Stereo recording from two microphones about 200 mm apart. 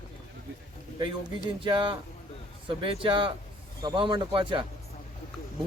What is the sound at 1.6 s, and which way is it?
Speech, 25° right (ahead or behind).